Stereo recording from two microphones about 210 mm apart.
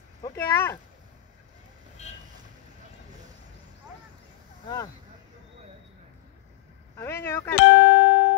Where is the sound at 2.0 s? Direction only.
30° left (ahead or behind).